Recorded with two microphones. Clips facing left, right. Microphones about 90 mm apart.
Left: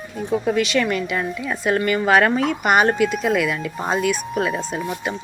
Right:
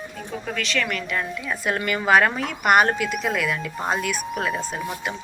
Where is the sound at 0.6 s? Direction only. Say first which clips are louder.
Left 6 dB; 15° left (ahead or behind).